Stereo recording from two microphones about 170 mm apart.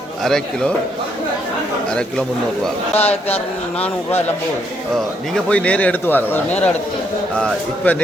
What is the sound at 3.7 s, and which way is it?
A man's voice, 10° left (ahead or behind).